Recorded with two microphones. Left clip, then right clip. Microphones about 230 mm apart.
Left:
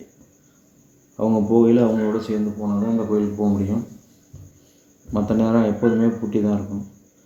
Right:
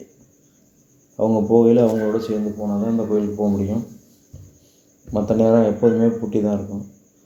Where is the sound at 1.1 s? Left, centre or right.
Right.